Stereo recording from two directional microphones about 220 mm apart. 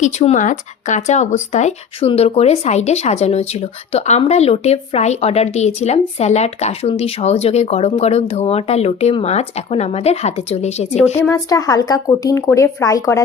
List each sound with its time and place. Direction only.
0.0 s speech: 30° left (ahead or behind)
11.3 s speech: 15° left (ahead or behind)